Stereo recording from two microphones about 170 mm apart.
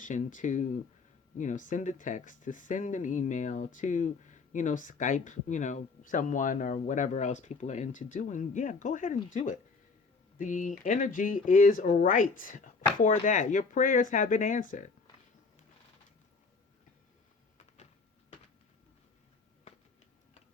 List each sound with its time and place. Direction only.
0.0 s speech: 50° left (ahead or behind)